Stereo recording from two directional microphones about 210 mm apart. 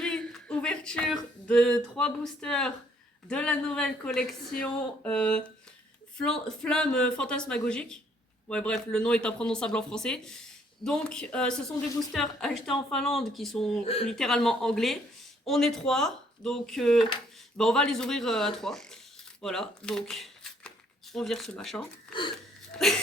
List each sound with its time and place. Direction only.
0.0 s a sound: 5° left (ahead or behind)
3.2 s speech: 5° left (ahead or behind)
13.8 s speech: 25° left (ahead or behind)
14.1 s speech: centre (ahead or behind)